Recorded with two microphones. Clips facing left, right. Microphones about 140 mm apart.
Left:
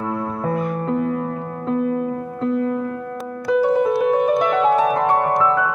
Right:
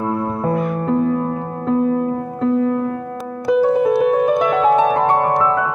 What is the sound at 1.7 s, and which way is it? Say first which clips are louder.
Music: right 4 dB; 35° right (ahead or behind).